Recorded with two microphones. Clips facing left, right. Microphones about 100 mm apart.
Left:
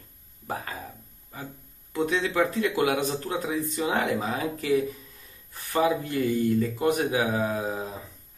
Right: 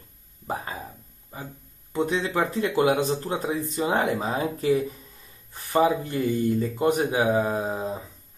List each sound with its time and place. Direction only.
0.5 s speech: 20° right (ahead or behind)
1.9 s speech: 25° right (ahead or behind)